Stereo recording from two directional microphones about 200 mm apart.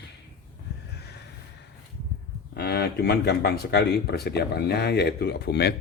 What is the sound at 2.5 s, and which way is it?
Speech, 55° left (ahead or behind).